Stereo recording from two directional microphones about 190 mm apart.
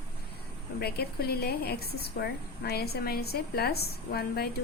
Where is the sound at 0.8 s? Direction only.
55° left (ahead or behind).